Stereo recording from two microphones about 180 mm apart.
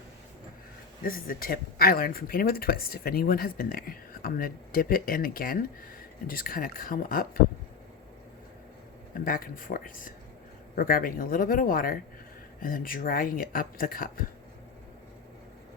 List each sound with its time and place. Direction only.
1.0 s speech: 55° left (ahead or behind)
9.2 s speech: 50° left (ahead or behind)